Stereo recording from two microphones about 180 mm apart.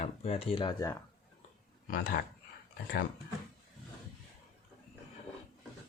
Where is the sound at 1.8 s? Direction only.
55° left (ahead or behind).